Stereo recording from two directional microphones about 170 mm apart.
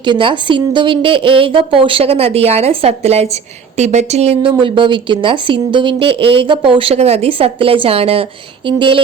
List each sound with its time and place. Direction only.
0.0 s speech: 30° right (ahead or behind)